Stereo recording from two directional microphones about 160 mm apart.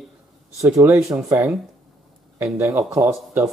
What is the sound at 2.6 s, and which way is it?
Speech, 20° right (ahead or behind).